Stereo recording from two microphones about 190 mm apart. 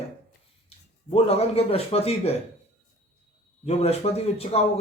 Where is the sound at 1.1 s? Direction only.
30° left (ahead or behind).